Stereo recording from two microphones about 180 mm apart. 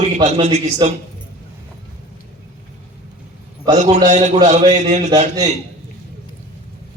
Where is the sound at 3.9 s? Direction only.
40° right (ahead or behind).